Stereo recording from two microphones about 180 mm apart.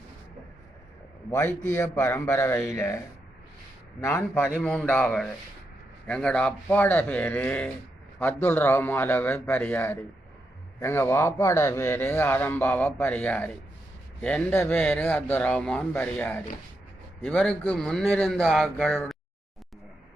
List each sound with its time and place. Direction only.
1.3 s a man's voice: 15° left (ahead or behind)
4.0 s a man's voice: 10° left (ahead or behind)